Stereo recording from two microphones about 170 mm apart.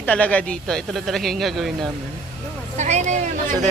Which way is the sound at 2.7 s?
45° right (ahead or behind).